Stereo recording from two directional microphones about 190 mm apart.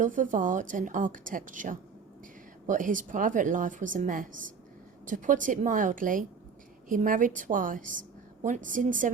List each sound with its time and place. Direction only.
0.0 s a woman's voice: 45° right (ahead or behind)